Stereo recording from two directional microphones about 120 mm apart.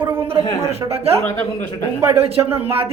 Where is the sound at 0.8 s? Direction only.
35° right (ahead or behind).